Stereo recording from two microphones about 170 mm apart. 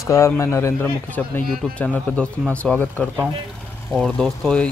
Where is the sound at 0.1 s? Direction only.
15° left (ahead or behind).